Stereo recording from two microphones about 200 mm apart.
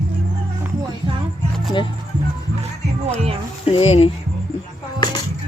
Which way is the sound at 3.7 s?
30° left (ahead or behind).